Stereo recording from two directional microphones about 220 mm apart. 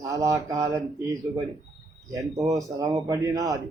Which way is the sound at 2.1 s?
15° right (ahead or behind).